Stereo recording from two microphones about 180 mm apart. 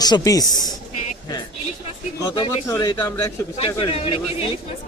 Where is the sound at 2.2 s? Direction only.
25° left (ahead or behind).